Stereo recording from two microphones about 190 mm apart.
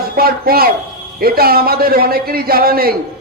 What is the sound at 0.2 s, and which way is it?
A man's voice, 55° right (ahead or behind).